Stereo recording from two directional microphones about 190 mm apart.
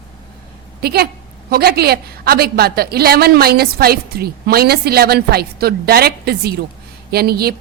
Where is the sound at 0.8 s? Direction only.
55° right (ahead or behind).